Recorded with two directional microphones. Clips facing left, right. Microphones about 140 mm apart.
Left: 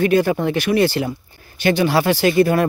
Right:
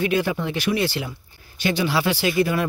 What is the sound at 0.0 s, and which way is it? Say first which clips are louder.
Speech: left 6 dB; 45° left (ahead or behind).